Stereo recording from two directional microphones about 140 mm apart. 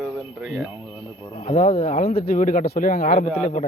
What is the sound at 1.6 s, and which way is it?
Speech, 45° left (ahead or behind).